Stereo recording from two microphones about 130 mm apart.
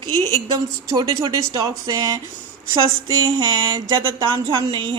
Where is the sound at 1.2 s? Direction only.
40° right (ahead or behind).